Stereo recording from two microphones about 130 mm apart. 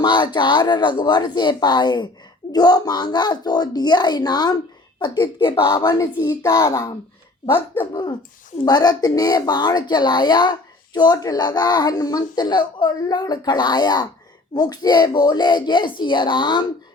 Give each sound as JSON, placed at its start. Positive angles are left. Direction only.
{"t": 0.0, "sound": "speech", "side_deg": 35}
{"t": 5.6, "sound": "speech", "side_deg": 20}
{"t": 8.6, "sound": "speech", "side_deg": 30}